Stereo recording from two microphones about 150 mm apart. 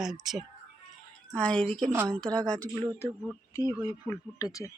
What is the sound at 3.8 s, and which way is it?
Speech, 25° left (ahead or behind).